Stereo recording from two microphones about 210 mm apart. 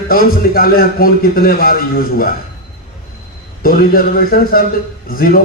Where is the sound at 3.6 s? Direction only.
45° left (ahead or behind).